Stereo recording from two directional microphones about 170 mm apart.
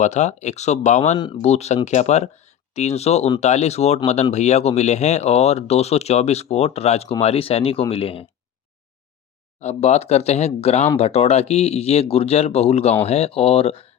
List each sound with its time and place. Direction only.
0.0 s speech: 45° left (ahead or behind)
9.6 s speech: 40° left (ahead or behind)